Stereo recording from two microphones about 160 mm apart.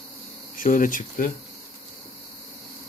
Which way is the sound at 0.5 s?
55° left (ahead or behind).